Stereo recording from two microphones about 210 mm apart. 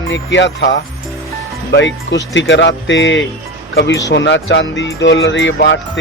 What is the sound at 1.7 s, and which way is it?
Speech, 55° left (ahead or behind).